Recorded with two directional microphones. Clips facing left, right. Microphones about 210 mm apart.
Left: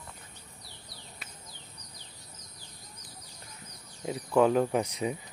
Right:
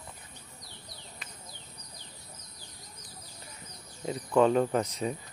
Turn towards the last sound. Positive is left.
turn(degrees=15)  # may be behind; listen again after turning